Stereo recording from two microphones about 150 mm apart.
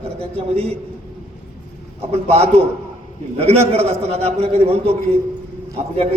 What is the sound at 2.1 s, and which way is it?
A man's voice, 45° right (ahead or behind).